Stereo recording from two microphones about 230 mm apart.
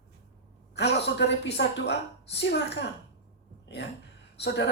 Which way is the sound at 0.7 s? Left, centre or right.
Left.